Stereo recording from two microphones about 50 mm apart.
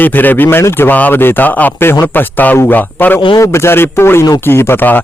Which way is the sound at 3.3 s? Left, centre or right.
Left.